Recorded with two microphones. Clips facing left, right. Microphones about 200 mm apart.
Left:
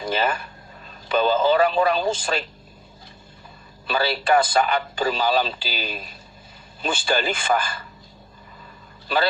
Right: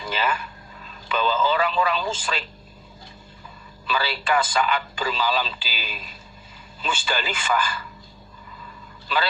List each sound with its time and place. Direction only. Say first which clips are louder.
0.1 s speech: left 2 dB; 45° left (ahead or behind)
3.8 s speech: left 4 dB; 35° left (ahead or behind)